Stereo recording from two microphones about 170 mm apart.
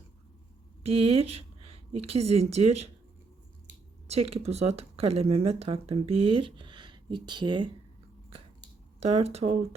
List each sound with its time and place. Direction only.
0.8 s a woman's voice: 35° right (ahead or behind)
4.1 s speech: 35° right (ahead or behind)
9.0 s speech: 40° right (ahead or behind)